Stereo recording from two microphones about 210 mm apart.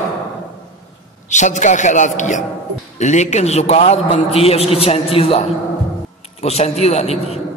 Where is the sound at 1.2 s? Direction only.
35° left (ahead or behind).